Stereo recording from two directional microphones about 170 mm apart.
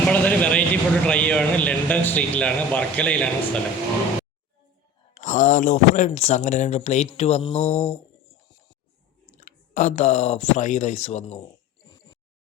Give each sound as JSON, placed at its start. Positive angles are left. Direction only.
{"t": 0.1, "sound": "a man's voice", "side_deg": 10}
{"t": 5.1, "sound": "speech", "side_deg": 50}
{"t": 7.2, "sound": "mantra", "side_deg": 40}
{"t": 9.2, "sound": "speech", "side_deg": 50}